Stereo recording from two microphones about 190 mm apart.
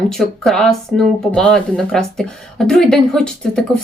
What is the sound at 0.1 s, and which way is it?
Speech, centre (ahead or behind).